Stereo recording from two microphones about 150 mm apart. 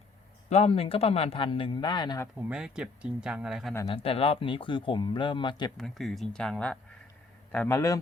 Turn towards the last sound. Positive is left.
turn(degrees=20)  # may be behind; listen again after turning